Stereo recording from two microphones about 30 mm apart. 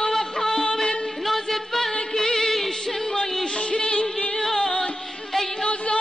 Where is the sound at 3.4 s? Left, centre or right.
Left.